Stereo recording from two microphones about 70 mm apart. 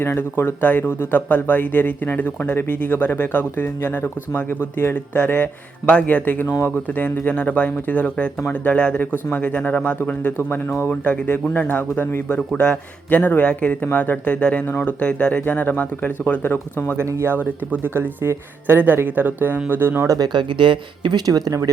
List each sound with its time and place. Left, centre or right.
0.0 s speech: left
10.8 s speech: centre
17.0 s speech: right
17.4 s speech: right
20.1 s speech: right
20.6 s speech: right
21.1 s speech: right